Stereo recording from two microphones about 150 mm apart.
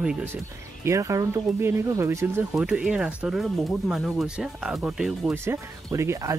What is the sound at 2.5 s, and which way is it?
Speech, 5° right (ahead or behind).